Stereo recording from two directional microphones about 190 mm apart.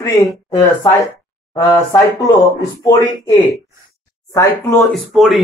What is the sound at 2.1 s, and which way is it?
Speech, 20° left (ahead or behind).